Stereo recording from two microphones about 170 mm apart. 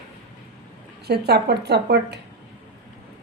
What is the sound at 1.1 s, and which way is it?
Speech, 70° right (ahead or behind).